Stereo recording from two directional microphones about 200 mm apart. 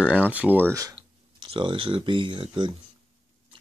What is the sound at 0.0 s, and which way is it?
Speech, 5° right (ahead or behind).